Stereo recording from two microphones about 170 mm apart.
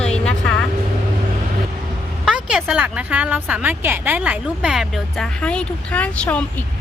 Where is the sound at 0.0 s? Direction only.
5° left (ahead or behind).